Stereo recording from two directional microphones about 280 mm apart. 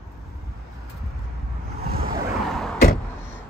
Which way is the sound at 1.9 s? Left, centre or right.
Right.